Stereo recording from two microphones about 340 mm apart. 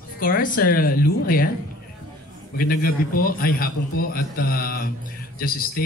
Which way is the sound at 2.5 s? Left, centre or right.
Left.